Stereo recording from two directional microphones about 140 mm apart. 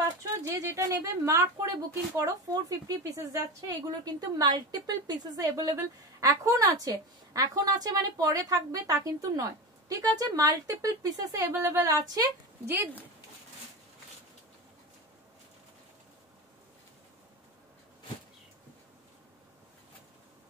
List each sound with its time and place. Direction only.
0.6 s a woman's voice: 20° right (ahead or behind)